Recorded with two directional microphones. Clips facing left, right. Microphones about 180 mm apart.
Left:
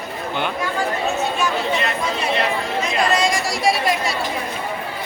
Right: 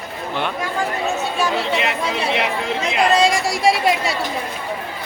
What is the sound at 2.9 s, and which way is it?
Speech, 25° right (ahead or behind).